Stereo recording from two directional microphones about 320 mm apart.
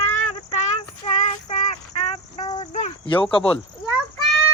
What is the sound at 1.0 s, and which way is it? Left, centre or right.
Child singing, left.